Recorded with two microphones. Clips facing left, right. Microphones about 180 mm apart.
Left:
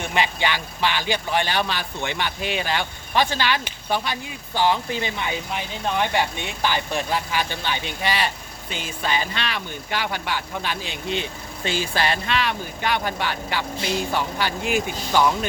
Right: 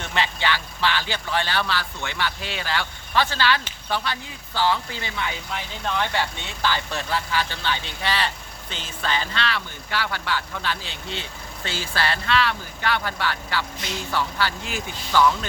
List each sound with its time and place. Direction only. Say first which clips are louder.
0.0 s speech: left 2 dB; 15° left (ahead or behind)